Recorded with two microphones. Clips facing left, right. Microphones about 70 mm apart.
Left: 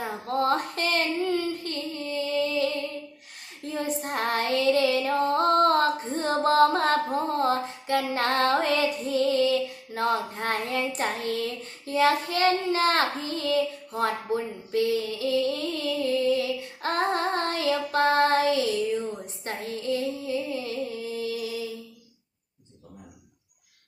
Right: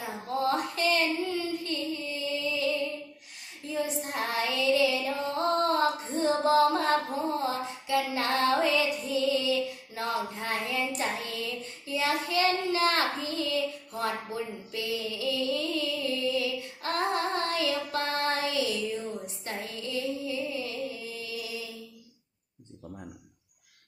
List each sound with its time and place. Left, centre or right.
0.3 s child singing: left
3.7 s female singing: left
19.5 s music: left